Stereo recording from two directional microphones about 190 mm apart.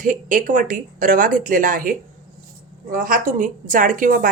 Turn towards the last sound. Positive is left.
turn(degrees=-45)  # may be behind; listen again after turning